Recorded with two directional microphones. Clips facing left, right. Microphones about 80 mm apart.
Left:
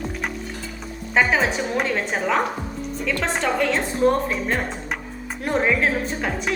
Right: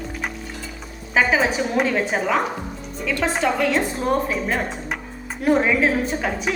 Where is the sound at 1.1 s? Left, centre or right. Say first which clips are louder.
Right 1 dB; centre.